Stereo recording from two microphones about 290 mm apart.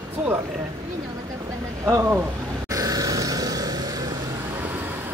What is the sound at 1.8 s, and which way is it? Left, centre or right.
Speech, centre.